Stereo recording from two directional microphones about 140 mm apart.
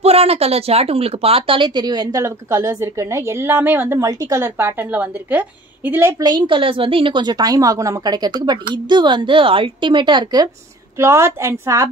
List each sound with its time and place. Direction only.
0.0 s a woman's voice: 45° right (ahead or behind); by 6.2 s 15° right (ahead or behind)
6.2 s a woman's voice: 35° right (ahead or behind)
11.0 s a woman's voice: 20° right (ahead or behind)